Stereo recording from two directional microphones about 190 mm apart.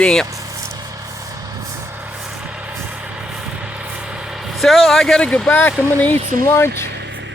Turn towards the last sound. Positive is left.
turn(degrees=-70)  # may be behind; listen again after turning